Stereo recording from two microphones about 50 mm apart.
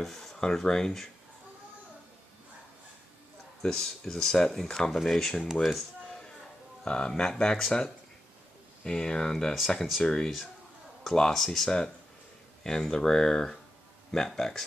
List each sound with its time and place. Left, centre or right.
0.0 s speech: centre
3.6 s speech: centre
5.4 s speech: centre
5.7 s music: centre
6.8 s speech: centre
8.8 s speech: centre